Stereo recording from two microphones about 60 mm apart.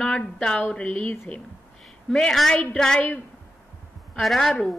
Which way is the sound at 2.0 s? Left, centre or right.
Centre.